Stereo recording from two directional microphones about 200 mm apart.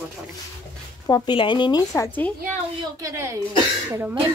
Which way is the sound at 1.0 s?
20° left (ahead or behind).